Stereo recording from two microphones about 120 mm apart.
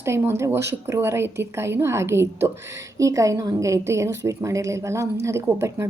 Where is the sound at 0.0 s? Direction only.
20° right (ahead or behind).